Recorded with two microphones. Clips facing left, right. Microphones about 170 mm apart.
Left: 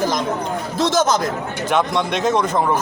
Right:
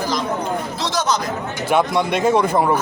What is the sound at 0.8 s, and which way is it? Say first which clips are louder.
Speech: left 6 dB; 45° left (ahead or behind).